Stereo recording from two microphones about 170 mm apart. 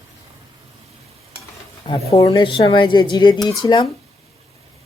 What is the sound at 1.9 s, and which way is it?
Speech, 20° left (ahead or behind).